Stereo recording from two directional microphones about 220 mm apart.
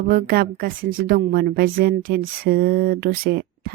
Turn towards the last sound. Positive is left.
turn(degrees=-45)  # may be behind; listen again after turning